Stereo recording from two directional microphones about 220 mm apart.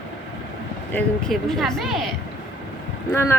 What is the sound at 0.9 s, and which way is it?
Speech, centre (ahead or behind).